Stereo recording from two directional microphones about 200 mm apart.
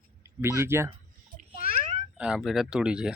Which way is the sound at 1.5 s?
45° left (ahead or behind).